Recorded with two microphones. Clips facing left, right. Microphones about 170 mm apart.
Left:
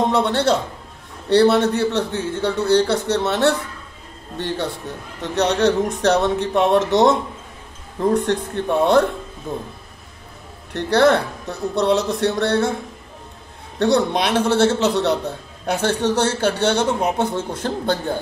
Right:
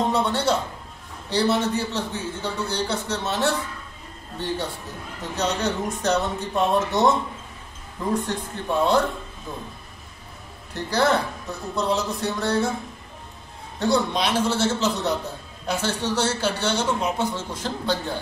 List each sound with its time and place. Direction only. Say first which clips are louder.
0.1 s a man's voice: left 4 dB; 75° left (ahead or behind)
8.1 s a man's voice: left 5 dB; 65° left (ahead or behind)
10.7 s a man's voice: left 6 dB; 65° left (ahead or behind)
13.7 s a man's voice: left 5 dB; 65° left (ahead or behind)
15.6 s a man's voice: left 6 dB; 55° left (ahead or behind)